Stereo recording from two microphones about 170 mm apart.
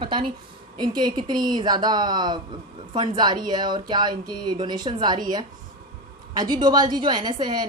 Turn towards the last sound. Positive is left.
turn(degrees=-25)  # may be behind; listen again after turning